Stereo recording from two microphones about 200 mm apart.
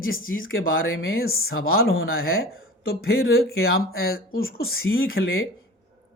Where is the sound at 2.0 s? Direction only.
50° left (ahead or behind).